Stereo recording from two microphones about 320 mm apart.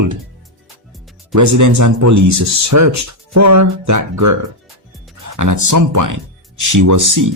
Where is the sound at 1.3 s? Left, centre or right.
Right.